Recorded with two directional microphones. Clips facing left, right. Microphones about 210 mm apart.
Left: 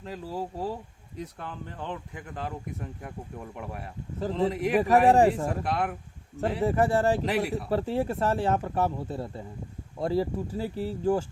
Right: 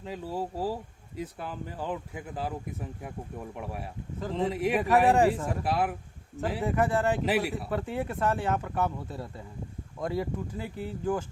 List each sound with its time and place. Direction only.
0.0 s speech: centre (ahead or behind)
5.0 s speech: 35° left (ahead or behind)
5.5 s speech: 5° right (ahead or behind)
6.6 s speech: 35° left (ahead or behind)
7.3 s speech: centre (ahead or behind)
7.7 s speech: 35° left (ahead or behind)